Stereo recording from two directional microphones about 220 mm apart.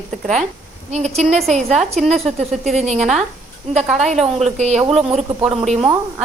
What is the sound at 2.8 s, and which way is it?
Speech, 30° right (ahead or behind).